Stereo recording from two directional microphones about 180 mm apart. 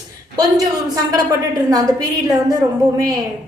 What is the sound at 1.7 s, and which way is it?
Speech, 20° right (ahead or behind).